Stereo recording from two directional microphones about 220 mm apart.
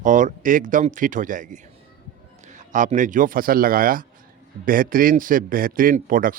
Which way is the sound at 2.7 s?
35° right (ahead or behind).